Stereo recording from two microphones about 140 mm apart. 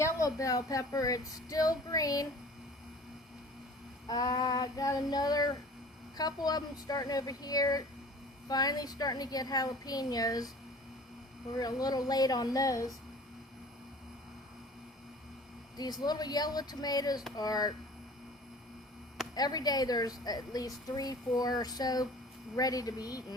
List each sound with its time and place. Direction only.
0.0 s a woman's voice: 25° left (ahead or behind)
4.1 s a woman's voice: 25° left (ahead or behind)
11.5 s a woman's voice: 25° left (ahead or behind)
15.8 s a woman's voice: 30° left (ahead or behind)
19.3 s a woman's voice: 30° left (ahead or behind)